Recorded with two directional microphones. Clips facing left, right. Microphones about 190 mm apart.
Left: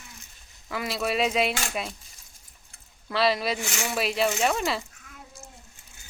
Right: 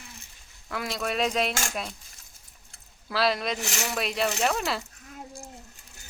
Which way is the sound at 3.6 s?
40° right (ahead or behind).